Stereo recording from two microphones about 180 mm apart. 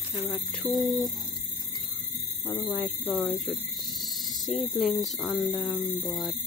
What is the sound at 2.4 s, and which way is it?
Speech, 10° left (ahead or behind).